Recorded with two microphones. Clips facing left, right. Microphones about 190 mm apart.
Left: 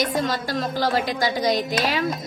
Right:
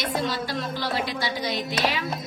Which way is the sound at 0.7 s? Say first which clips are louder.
Left 5 dB; 45° left (ahead or behind).